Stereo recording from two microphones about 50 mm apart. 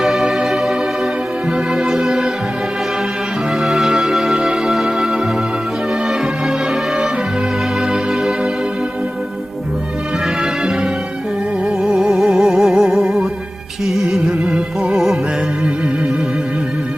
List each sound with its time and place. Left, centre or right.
0.0 s music: centre
3.6 s music: centre
10.4 s music: centre
12.1 s music: centre